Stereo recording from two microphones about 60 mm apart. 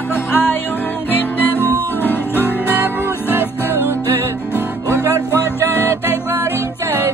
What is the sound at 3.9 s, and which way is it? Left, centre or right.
Music, right.